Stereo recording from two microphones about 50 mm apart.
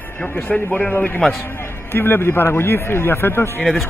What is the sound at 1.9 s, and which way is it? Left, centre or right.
A man's voice, left.